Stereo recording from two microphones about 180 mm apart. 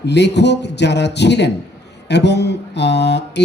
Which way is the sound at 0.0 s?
70° left (ahead or behind).